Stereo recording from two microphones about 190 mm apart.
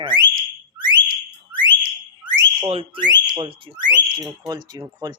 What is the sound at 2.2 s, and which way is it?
Speech, 25° right (ahead or behind).